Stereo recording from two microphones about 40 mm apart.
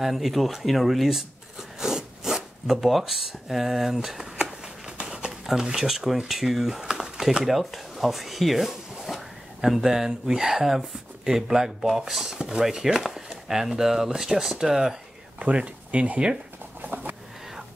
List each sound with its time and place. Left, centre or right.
0.0 s speech: centre
4.4 s a sound: right; by 9.8 s centre
9.8 s speech: centre
12.4 s chopping: right
12.6 s speech: centre
15.3 s speech: right
16.8 s a sound: right